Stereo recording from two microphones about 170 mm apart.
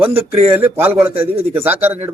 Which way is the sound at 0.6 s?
10° right (ahead or behind).